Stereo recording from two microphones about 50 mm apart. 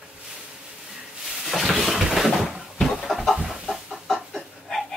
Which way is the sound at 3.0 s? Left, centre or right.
Centre.